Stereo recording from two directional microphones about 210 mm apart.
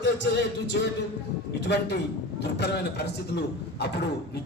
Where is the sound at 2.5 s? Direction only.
50° left (ahead or behind).